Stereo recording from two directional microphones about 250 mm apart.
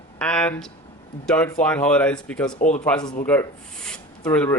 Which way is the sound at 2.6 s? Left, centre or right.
Left.